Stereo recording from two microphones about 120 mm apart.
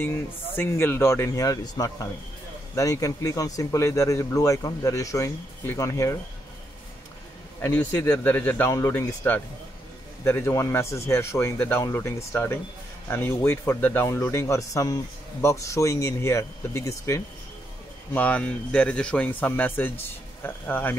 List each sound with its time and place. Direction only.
0.6 s speech: 20° left (ahead or behind)
7.6 s speech: 15° left (ahead or behind)
18.1 s speech: 10° left (ahead or behind)